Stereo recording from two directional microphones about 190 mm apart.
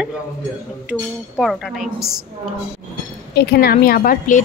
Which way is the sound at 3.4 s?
55° left (ahead or behind).